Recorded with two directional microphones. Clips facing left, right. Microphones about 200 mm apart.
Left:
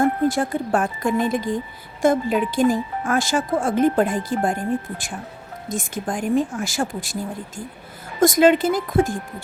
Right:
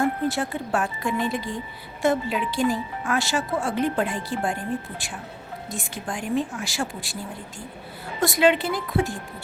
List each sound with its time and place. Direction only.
0.0 s speech: 45° left (ahead or behind)
8.2 s speech: 45° left (ahead or behind)